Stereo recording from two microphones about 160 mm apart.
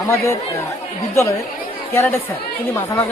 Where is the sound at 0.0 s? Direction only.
20° left (ahead or behind).